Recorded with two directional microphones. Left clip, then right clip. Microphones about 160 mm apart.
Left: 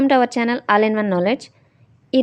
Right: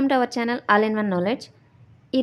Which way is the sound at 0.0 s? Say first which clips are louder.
Left 5 dB; 25° left (ahead or behind).